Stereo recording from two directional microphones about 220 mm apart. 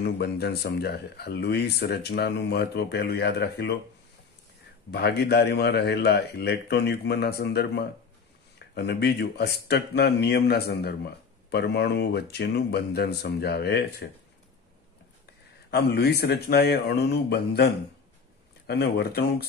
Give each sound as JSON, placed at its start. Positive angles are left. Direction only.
{"t": 0.0, "sound": "speech", "side_deg": 50}
{"t": 4.9, "sound": "speech", "side_deg": 50}
{"t": 15.7, "sound": "speech", "side_deg": 50}